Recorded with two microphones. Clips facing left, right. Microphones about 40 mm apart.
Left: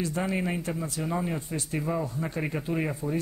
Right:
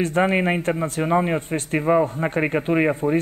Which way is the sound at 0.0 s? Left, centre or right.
Right.